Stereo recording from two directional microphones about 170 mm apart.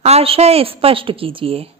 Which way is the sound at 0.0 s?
35° right (ahead or behind).